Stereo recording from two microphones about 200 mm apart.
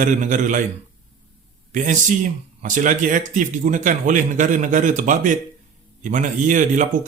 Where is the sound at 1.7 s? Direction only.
40° right (ahead or behind).